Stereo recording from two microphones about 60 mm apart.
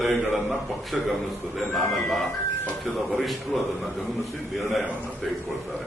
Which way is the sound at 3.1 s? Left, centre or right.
Centre.